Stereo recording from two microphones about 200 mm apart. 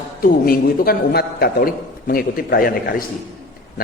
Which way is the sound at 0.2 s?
45° left (ahead or behind).